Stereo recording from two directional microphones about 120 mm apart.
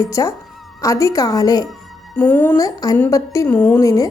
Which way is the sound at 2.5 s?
30° left (ahead or behind).